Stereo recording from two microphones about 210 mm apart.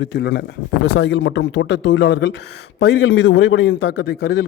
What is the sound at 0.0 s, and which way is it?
A man's voice, 55° left (ahead or behind).